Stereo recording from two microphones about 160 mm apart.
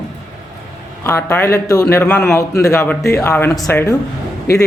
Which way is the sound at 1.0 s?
15° left (ahead or behind).